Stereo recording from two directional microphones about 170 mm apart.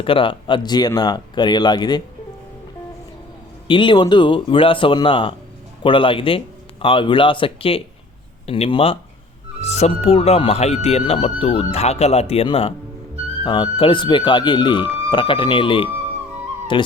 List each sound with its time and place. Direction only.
0.0 s speech: 30° left (ahead or behind)
3.7 s speech: 30° left (ahead or behind)